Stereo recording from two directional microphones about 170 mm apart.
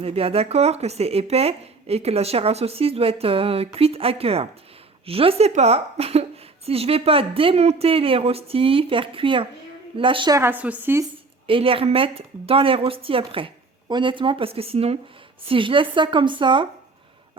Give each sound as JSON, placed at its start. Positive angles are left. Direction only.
{"t": 0.0, "sound": "speech", "side_deg": -35}
{"t": 10.3, "sound": "a woman's voice", "side_deg": -10}
{"t": 11.4, "sound": "speech", "side_deg": -30}